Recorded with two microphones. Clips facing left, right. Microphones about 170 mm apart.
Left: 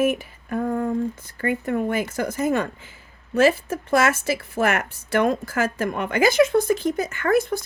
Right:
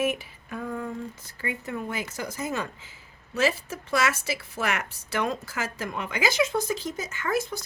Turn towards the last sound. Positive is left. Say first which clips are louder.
# left 8 dB
turn(degrees=55)  # may be behind; listen again after turning